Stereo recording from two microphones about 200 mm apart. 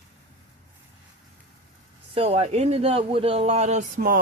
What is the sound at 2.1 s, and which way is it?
A man's voice, 30° right (ahead or behind).